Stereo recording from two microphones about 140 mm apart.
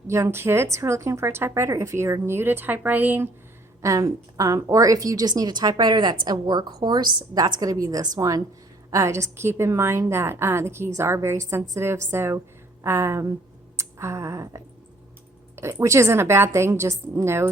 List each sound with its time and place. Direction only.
0.1 s speech: 20° right (ahead or behind)
3.8 s a woman's voice: 25° right (ahead or behind)
13.7 s a sound: 20° right (ahead or behind)
15.5 s a woman's voice: 20° right (ahead or behind)